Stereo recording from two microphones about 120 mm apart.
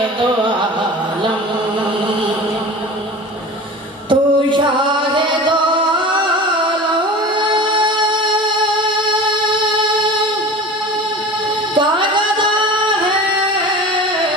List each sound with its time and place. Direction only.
4.1 s music: 40° right (ahead or behind)
7.3 s music: 40° right (ahead or behind)
11.7 s music: 40° right (ahead or behind)